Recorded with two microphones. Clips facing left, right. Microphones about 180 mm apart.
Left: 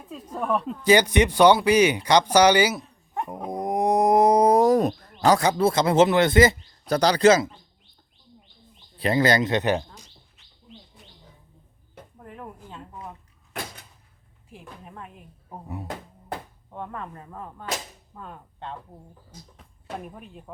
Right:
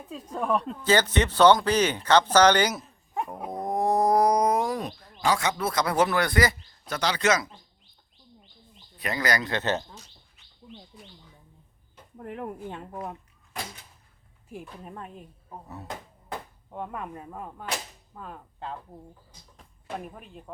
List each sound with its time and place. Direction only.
0.1 s speech: centre (ahead or behind)
0.8 s speech: 15° left (ahead or behind)
3.5 s wild animals: 15° left (ahead or behind)
6.9 s a man's voice: 35° left (ahead or behind)
9.0 s speech: 25° left (ahead or behind)
12.2 s speech: 70° right (ahead or behind)
14.5 s speech: 40° right (ahead or behind)
15.4 s speech: 15° left (ahead or behind)
16.7 s whip: 10° right (ahead or behind)
18.1 s speech: centre (ahead or behind)
20.1 s speech: centre (ahead or behind)